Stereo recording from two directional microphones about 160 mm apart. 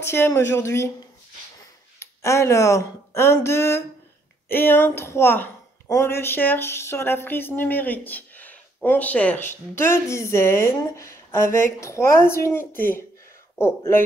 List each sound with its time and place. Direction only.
0.0 s a woman's voice: 15° left (ahead or behind)
2.0 s a woman's voice: 15° left (ahead or behind)
12.7 s speech: 65° left (ahead or behind)
13.6 s a woman's voice: 15° left (ahead or behind)